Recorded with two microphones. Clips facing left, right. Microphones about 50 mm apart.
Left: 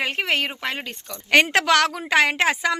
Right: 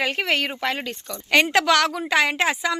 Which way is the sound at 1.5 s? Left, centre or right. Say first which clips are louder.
Even; left.